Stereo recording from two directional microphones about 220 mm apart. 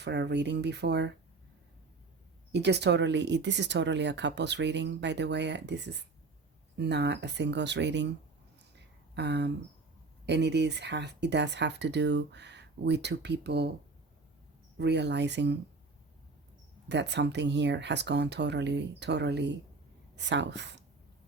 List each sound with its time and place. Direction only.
0.0 s speech: 50° right (ahead or behind)
2.5 s speech: 50° right (ahead or behind)
9.1 s speech: 50° right (ahead or behind)
14.8 s speech: 50° right (ahead or behind)
16.9 s speech: 50° right (ahead or behind)